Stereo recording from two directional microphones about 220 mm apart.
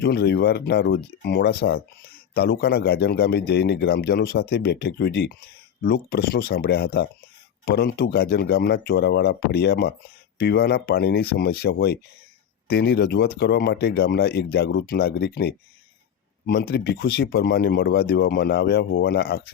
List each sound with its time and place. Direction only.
0.0 s speech: 45° left (ahead or behind)